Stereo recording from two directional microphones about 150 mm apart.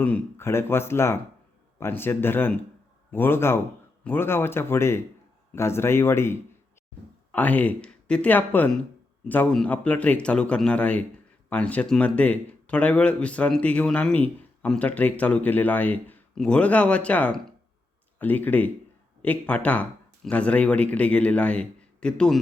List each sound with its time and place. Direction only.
0.0 s speech: 15° left (ahead or behind)